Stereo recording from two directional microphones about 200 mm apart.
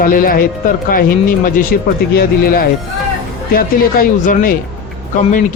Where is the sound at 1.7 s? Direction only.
50° left (ahead or behind).